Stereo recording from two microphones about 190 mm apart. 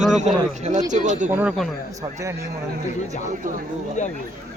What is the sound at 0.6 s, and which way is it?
Speech, 40° right (ahead or behind).